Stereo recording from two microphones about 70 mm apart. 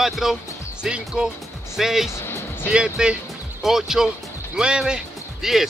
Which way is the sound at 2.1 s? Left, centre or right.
Left.